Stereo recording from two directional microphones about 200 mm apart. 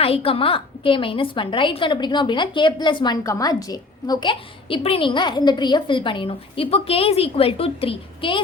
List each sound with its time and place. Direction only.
0.0 s a woman's voice: 30° left (ahead or behind)